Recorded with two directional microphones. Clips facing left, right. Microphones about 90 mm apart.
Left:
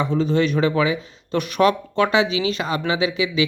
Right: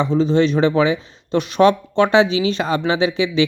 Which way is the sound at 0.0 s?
20° right (ahead or behind).